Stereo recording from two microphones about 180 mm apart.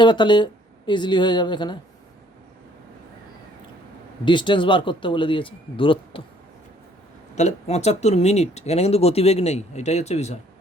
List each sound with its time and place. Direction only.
0.0 s speech: 25° left (ahead or behind)
4.3 s speech: 25° left (ahead or behind)
7.3 s speech: 40° left (ahead or behind)